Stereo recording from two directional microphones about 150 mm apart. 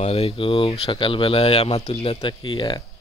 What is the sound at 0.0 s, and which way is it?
Speech, 40° left (ahead or behind).